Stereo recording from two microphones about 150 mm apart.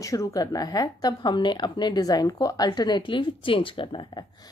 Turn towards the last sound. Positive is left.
turn(degrees=30)  # may be behind; listen again after turning